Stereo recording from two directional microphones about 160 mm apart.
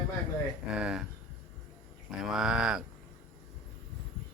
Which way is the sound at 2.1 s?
5° right (ahead or behind).